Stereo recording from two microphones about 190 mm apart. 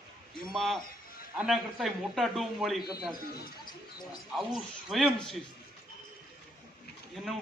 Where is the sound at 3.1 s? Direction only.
50° left (ahead or behind).